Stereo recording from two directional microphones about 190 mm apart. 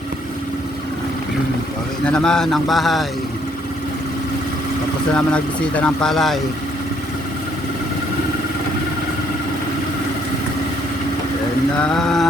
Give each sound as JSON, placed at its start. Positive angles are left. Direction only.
{"t": 2.0, "sound": "speech", "side_deg": 5}
{"t": 5.1, "sound": "speech", "side_deg": 5}
{"t": 11.8, "sound": "speech", "side_deg": 5}